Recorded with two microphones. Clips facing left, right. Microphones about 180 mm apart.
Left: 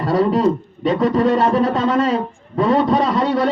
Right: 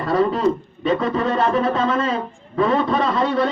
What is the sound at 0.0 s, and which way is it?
Speech, 35° left (ahead or behind).